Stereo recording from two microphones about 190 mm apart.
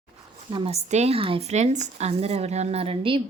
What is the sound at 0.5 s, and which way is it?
A woman's voice, 30° right (ahead or behind).